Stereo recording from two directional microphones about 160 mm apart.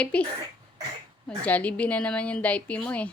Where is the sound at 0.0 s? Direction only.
10° left (ahead or behind).